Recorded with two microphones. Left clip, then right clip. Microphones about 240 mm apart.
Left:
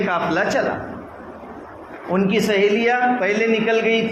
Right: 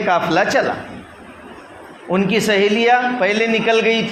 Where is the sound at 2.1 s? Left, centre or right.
Right.